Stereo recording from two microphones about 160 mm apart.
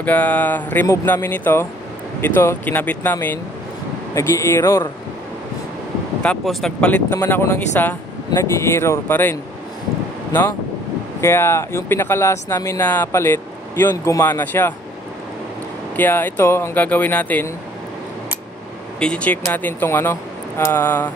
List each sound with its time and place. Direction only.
0.0 s speech: 10° left (ahead or behind)
6.2 s speech: centre (ahead or behind)
11.1 s speech: 15° left (ahead or behind)
16.0 s speech: 10° left (ahead or behind)
18.9 s speech: 5° left (ahead or behind)